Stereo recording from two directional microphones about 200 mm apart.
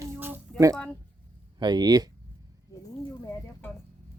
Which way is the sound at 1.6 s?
20° right (ahead or behind).